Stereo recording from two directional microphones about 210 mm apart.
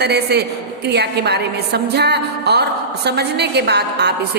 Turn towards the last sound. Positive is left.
turn(degrees=-50)  # may be behind; listen again after turning